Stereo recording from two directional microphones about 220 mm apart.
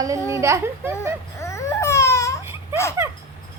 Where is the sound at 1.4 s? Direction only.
15° left (ahead or behind).